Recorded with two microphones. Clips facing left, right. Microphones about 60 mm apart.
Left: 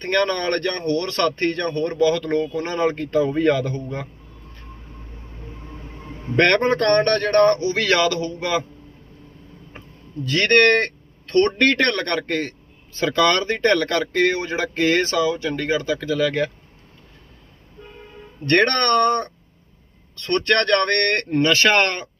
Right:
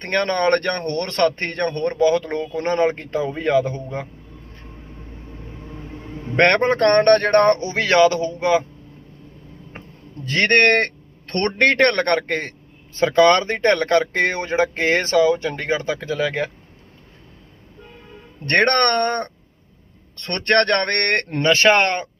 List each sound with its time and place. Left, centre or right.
0.0 s speech: right
2.6 s speech: right
6.3 s speech: right
10.2 s speech: right
18.4 s speech: right
21.4 s speech: right